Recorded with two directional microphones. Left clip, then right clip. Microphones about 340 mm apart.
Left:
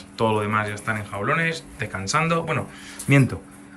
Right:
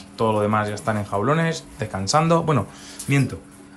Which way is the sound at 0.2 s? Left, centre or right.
Centre.